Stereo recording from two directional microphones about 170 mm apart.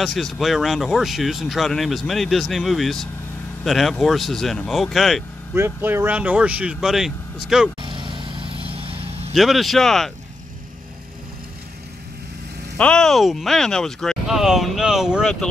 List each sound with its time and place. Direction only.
0.0 s speech: centre (ahead or behind)
5.5 s speech: 10° right (ahead or behind)
7.8 s vehicle: 30° right (ahead or behind)
9.3 s speech: centre (ahead or behind)
12.7 s speech: 5° left (ahead or behind)